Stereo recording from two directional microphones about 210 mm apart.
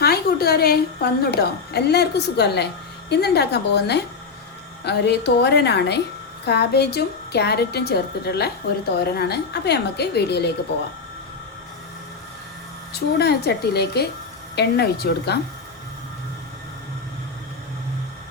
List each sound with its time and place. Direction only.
0.0 s a woman's voice: 45° left (ahead or behind)
12.9 s a woman's voice: 50° left (ahead or behind)